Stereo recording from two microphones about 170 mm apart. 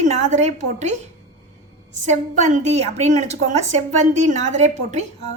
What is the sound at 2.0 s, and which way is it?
A woman's voice, 45° right (ahead or behind).